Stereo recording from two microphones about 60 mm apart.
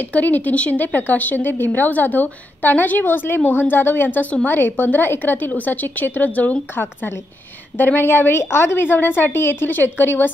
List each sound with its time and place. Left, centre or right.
0.1 s a woman's voice: left